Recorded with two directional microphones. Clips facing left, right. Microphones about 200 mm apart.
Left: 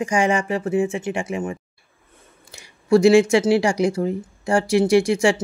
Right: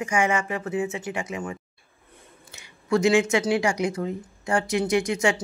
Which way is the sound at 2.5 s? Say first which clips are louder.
Left 7 dB; 30° left (ahead or behind).